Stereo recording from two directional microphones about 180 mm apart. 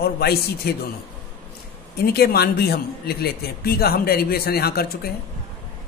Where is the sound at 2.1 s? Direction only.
60° left (ahead or behind).